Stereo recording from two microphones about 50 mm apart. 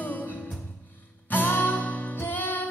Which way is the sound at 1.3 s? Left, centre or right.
Left.